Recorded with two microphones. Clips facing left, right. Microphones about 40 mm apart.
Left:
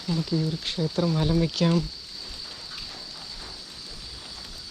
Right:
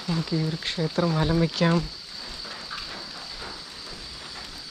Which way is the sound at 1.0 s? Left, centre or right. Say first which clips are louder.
Right 1 dB; centre.